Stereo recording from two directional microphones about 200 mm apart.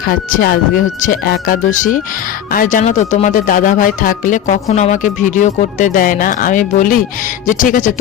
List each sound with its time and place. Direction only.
0.1 s speech: 45° left (ahead or behind)